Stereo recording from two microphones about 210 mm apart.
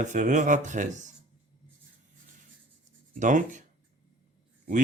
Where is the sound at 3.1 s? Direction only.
35° right (ahead or behind).